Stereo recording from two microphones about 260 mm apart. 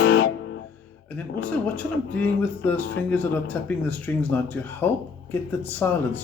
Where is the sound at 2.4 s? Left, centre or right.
Centre.